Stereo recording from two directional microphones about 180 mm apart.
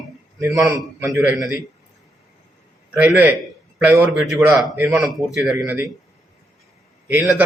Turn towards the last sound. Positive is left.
turn(degrees=-5)  # may be behind; listen again after turning